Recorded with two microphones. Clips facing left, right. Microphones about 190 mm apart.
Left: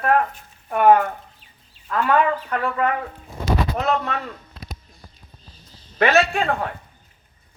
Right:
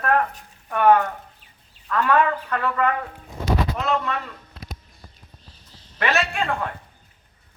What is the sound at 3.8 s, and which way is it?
Speech, 45° left (ahead or behind).